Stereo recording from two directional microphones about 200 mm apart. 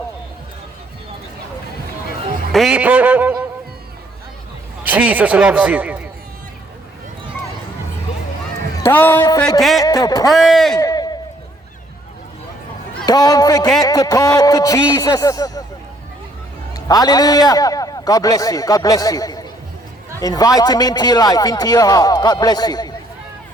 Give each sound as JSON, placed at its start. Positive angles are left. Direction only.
{"t": 2.5, "sound": "speech", "side_deg": 0}
{"t": 4.8, "sound": "a man's voice", "side_deg": -10}
{"t": 8.8, "sound": "a man's voice", "side_deg": 10}
{"t": 9.8, "sound": "a man's voice", "side_deg": 20}
{"t": 10.3, "sound": "a man's voice", "side_deg": 0}
{"t": 10.8, "sound": "a sound", "side_deg": 20}
{"t": 13.1, "sound": "a man's voice", "side_deg": 20}
{"t": 16.7, "sound": "a man's voice", "side_deg": 20}